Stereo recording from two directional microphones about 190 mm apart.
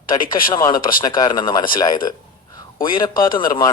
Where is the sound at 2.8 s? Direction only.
50° left (ahead or behind).